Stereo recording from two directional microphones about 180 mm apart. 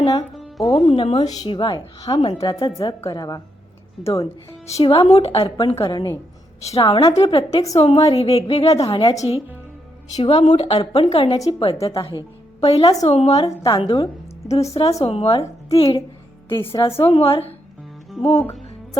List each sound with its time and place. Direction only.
0.0 s speech: 25° left (ahead or behind)
0.3 s music: centre (ahead or behind)
0.9 s a woman's voice: 30° left (ahead or behind)
8.9 s speech: 20° left (ahead or behind)
10.2 s a woman's voice: 35° left (ahead or behind)
13.6 s speech: 25° left (ahead or behind)
14.4 s a woman's voice: 35° left (ahead or behind)